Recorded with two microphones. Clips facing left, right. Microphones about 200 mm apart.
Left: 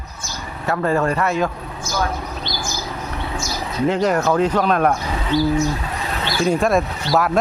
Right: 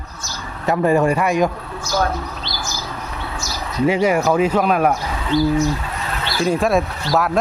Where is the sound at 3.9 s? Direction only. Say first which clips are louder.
Right 1 dB; 10° right (ahead or behind).